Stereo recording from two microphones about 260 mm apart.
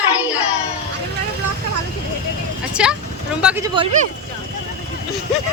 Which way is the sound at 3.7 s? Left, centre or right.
Centre.